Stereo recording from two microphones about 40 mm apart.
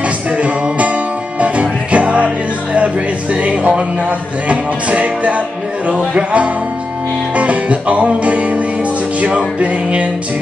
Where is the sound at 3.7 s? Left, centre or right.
Right.